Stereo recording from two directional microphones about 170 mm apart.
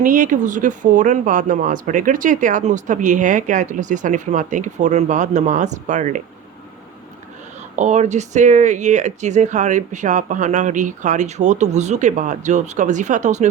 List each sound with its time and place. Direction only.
0.0 s speech: 50° right (ahead or behind)
7.8 s speech: 45° right (ahead or behind)